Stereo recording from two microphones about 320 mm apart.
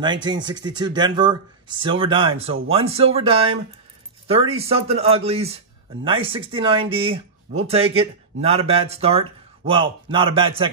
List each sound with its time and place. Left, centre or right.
0.0 s speech: centre